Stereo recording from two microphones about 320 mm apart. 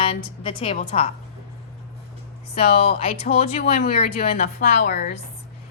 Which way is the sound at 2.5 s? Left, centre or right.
Centre.